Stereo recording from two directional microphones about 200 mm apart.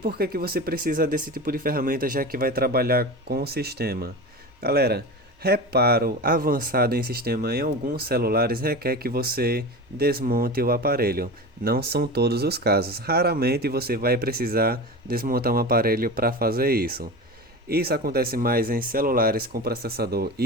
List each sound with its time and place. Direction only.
0.0 s speech: 50° right (ahead or behind)